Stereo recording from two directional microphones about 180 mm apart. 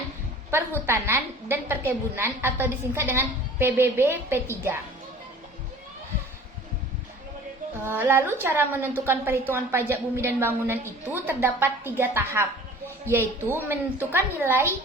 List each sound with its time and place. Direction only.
0.5 s a woman's voice: 15° right (ahead or behind)
7.9 s a woman's voice: 10° right (ahead or behind)